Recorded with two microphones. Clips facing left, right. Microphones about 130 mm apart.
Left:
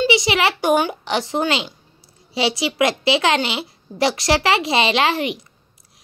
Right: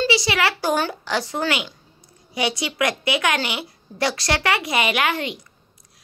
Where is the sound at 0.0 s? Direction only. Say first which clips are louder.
Left 3 dB; 20° left (ahead or behind).